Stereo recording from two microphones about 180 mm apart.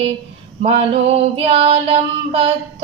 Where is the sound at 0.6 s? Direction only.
35° right (ahead or behind).